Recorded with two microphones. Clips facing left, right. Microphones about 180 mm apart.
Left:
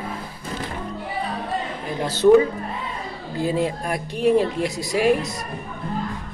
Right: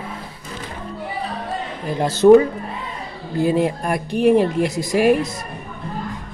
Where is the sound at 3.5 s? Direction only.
55° right (ahead or behind).